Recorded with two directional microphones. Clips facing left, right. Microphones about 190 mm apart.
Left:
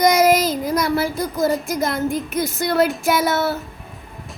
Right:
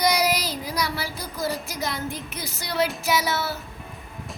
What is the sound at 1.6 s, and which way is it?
A woman's voice, 50° left (ahead or behind).